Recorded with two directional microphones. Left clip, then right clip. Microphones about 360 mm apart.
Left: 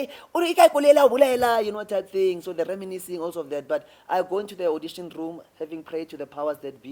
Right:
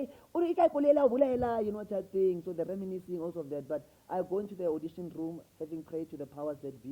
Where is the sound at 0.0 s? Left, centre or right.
Centre.